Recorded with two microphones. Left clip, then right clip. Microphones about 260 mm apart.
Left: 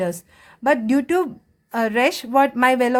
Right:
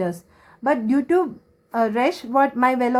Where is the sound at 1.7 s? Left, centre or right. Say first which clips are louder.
Left 1 dB; left.